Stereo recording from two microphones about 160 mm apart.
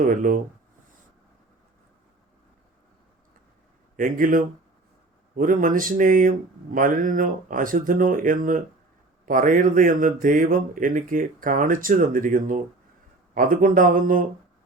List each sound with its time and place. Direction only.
0.0 s speech: 60° right (ahead or behind)
3.9 s speech: 55° right (ahead or behind)